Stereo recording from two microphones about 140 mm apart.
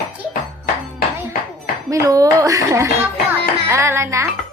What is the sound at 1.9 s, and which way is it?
Speech, 25° right (ahead or behind).